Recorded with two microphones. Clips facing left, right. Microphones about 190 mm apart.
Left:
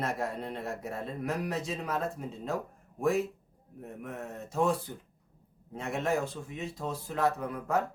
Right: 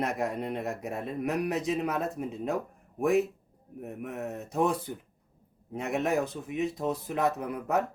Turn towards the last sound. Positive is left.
turn(degrees=-20)  # may be behind; listen again after turning